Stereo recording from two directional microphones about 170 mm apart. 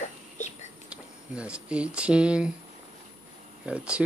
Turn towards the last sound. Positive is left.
turn(degrees=-5)  # may be behind; listen again after turning